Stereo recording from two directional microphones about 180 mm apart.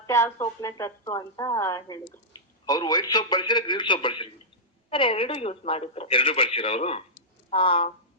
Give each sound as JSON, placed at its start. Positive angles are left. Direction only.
{"t": 0.0, "sound": "a man's voice", "side_deg": 15}